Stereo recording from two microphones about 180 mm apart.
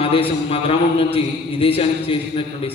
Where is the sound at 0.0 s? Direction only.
30° left (ahead or behind).